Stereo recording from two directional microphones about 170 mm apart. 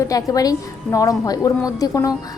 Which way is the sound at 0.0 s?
20° left (ahead or behind).